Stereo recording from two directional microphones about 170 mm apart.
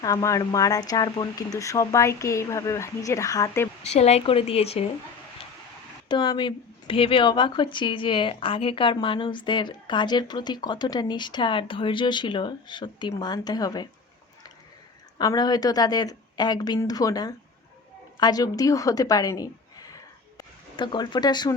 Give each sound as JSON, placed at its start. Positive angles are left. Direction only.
{"t": 0.0, "sound": "speech", "side_deg": 20}
{"t": 3.8, "sound": "a woman's voice", "side_deg": 40}
{"t": 6.1, "sound": "speech", "side_deg": 25}
{"t": 15.2, "sound": "a woman's voice", "side_deg": 25}